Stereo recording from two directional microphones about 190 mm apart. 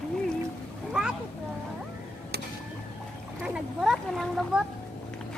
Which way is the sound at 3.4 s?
5° right (ahead or behind).